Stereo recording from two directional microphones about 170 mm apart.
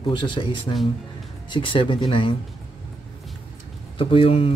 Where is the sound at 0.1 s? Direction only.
30° left (ahead or behind).